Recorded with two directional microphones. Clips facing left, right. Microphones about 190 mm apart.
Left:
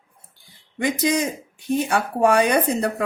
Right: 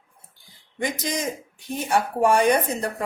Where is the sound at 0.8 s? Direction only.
65° left (ahead or behind).